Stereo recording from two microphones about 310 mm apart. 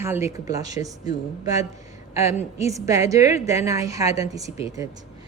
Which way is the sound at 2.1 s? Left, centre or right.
Left.